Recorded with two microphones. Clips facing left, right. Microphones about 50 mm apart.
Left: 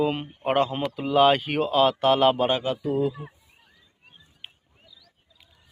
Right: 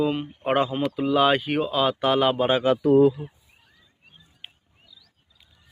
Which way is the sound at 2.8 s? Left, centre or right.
Right.